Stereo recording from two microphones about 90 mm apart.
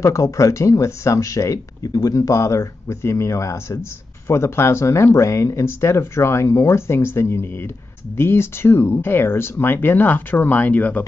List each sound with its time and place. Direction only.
0.0 s speech: 35° left (ahead or behind)
2.1 s speech: 35° left (ahead or behind); by 11.1 s 15° left (ahead or behind)